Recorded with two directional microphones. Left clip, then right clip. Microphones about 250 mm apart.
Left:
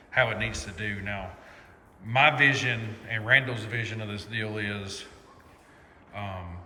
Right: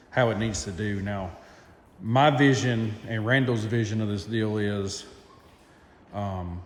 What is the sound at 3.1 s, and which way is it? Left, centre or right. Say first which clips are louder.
Speech: left 2 dB; left.